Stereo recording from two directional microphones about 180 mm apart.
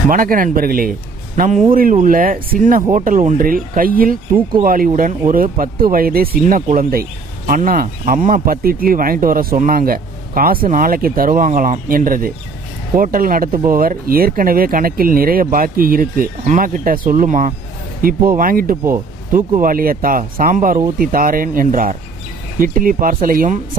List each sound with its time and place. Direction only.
0.1 s speech: 50° right (ahead or behind)
1.4 s speech: 40° right (ahead or behind)